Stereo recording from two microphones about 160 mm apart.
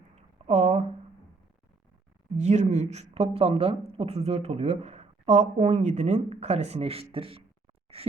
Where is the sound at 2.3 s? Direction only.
45° right (ahead or behind).